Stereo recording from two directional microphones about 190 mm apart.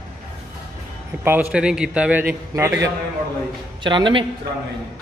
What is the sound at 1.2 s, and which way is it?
A man's voice, 10° right (ahead or behind).